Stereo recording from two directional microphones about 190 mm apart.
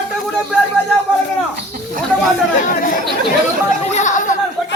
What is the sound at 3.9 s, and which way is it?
Speech, 40° left (ahead or behind).